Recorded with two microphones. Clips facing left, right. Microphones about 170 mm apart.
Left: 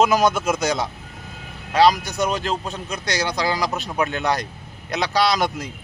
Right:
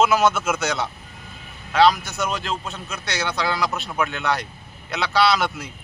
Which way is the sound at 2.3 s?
40° left (ahead or behind).